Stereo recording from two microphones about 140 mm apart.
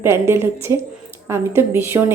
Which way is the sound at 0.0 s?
20° right (ahead or behind).